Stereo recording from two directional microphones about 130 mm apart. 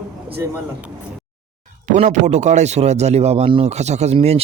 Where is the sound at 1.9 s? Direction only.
65° right (ahead or behind).